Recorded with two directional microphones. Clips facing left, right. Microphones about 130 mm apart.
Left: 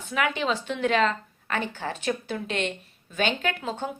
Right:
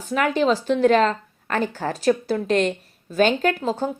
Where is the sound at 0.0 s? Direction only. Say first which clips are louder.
Right 7 dB; 40° right (ahead or behind).